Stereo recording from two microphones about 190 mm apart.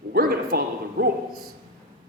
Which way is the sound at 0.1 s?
55° right (ahead or behind).